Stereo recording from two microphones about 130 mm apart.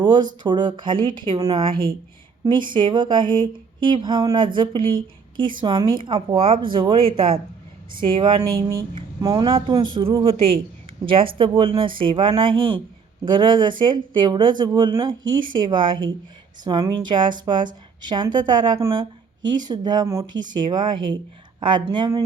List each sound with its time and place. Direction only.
0.0 s speech: 35° right (ahead or behind)
8.4 s speech: 25° right (ahead or behind)
9.5 s speech: 45° right (ahead or behind)